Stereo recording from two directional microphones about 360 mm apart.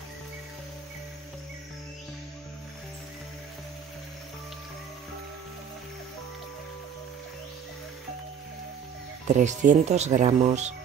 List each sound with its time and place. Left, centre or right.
9.3 s speech: centre